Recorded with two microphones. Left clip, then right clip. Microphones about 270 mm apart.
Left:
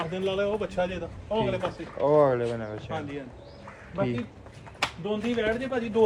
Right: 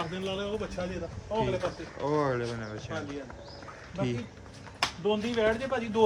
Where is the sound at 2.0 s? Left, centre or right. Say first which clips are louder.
Left 8 dB; centre.